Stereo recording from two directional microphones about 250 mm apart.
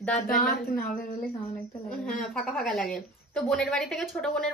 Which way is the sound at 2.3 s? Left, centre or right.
Centre.